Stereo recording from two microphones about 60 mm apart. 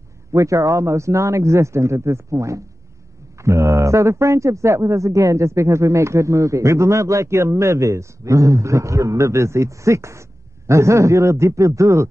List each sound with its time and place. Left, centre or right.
0.3 s a man's voice: right